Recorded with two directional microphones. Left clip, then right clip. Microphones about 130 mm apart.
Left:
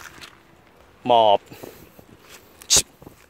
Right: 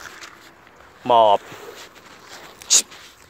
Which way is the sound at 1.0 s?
70° left (ahead or behind).